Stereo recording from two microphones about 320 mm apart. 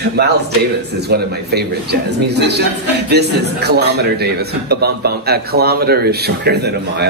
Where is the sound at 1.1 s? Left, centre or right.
Right.